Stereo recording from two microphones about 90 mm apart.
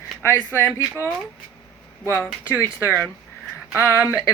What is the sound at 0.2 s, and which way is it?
Speech, 25° left (ahead or behind).